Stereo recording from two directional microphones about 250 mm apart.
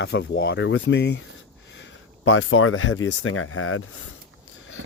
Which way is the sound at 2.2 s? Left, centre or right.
Left.